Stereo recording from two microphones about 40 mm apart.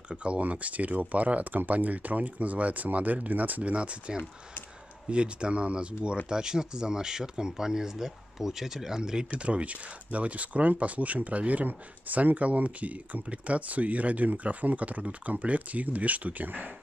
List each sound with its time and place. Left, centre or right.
0.1 s speech: right
3.7 s speech: right
6.2 s speech: centre
9.4 s speech: right